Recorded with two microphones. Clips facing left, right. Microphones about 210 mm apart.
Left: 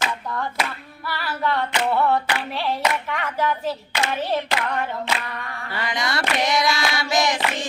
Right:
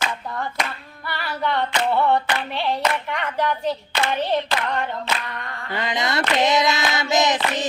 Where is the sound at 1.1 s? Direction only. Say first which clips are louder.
Even; centre (ahead or behind).